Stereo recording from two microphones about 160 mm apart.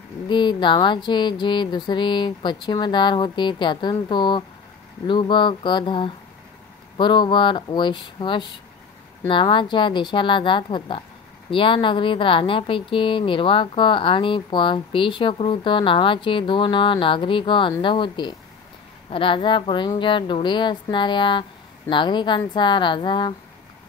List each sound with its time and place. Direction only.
0.3 s a woman's voice: 30° left (ahead or behind)